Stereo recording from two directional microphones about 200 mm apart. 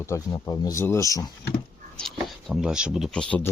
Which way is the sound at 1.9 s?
Centre (ahead or behind).